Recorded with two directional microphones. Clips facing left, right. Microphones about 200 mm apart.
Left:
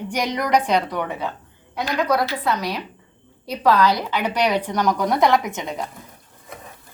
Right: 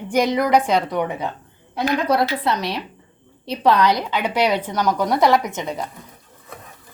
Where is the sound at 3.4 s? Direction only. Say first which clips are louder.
Right 1 dB; 25° right (ahead or behind); by 5.5 s centre (ahead or behind).